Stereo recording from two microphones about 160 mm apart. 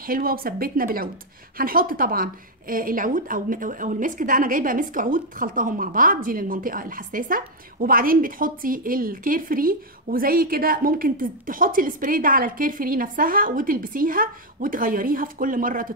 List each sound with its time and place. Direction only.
0.0 s a woman's voice: 65° right (ahead or behind)